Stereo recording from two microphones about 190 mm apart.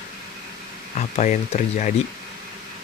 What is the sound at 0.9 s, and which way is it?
Speech, 40° left (ahead or behind).